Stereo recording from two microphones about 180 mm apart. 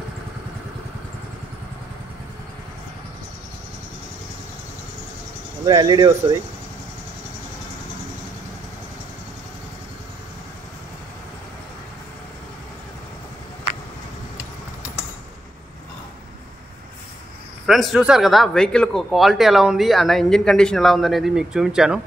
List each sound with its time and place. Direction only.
5.7 s speech: 20° right (ahead or behind)
17.6 s speech: centre (ahead or behind)